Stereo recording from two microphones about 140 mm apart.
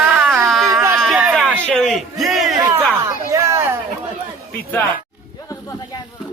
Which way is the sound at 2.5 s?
25° right (ahead or behind).